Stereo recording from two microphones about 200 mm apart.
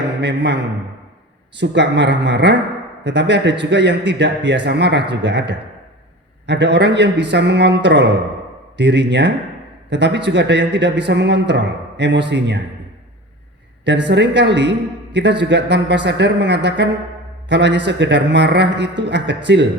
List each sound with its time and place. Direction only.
0.2 s a man's voice: 60° right (ahead or behind)
13.8 s a man's voice: 60° right (ahead or behind)